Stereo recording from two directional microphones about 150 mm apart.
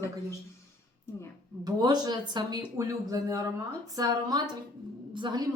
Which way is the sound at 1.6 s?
25° right (ahead or behind).